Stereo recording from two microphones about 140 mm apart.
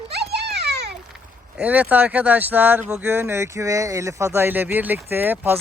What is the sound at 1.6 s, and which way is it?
Speech, 10° right (ahead or behind).